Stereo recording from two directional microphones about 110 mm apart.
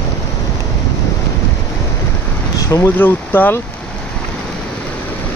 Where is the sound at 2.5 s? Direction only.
30° left (ahead or behind).